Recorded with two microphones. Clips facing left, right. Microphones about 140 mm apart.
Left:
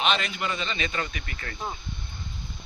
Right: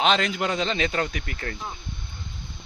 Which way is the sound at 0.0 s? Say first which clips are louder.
Right 4 dB; 90° right.